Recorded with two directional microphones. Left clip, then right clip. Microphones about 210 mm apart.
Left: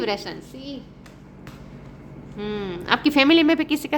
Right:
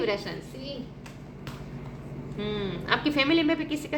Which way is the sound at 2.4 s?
50° left (ahead or behind).